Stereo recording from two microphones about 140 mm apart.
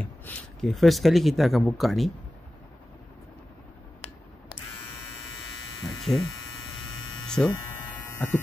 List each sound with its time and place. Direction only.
0.0 s speech: 10° left (ahead or behind)
5.9 s electric shaver: centre (ahead or behind)
7.2 s a sound: 5° left (ahead or behind)
8.1 s electric shaver: 20° left (ahead or behind)